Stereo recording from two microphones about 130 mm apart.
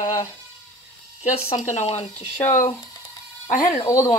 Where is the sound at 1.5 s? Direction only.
65° left (ahead or behind).